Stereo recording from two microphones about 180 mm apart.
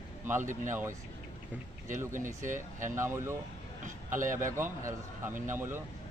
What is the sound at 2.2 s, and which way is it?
Speech, 45° right (ahead or behind).